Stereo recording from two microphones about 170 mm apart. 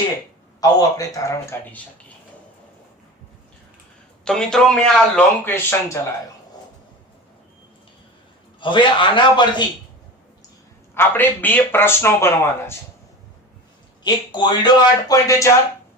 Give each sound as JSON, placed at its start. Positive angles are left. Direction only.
{"t": 0.8, "sound": "speech", "side_deg": 20}
{"t": 4.3, "sound": "speech", "side_deg": 5}
{"t": 8.6, "sound": "speech", "side_deg": 30}
{"t": 10.9, "sound": "speech", "side_deg": 10}
{"t": 14.0, "sound": "speech", "side_deg": 25}